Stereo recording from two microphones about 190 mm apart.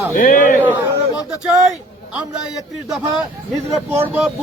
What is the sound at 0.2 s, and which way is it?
Speech, 45° left (ahead or behind).